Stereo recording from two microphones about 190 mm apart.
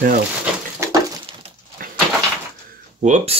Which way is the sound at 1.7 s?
50° right (ahead or behind).